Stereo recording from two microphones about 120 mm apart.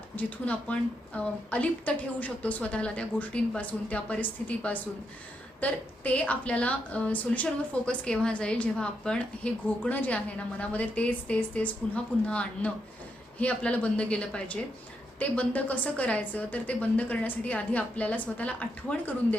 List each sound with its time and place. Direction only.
0.2 s a woman's voice: 10° left (ahead or behind)